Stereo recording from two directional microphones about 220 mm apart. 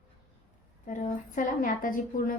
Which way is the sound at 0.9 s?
35° left (ahead or behind).